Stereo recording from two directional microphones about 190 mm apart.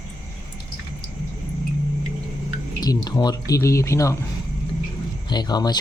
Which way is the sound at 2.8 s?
20° left (ahead or behind).